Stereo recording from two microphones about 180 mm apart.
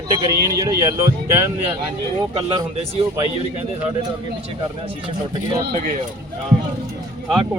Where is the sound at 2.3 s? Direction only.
35° right (ahead or behind).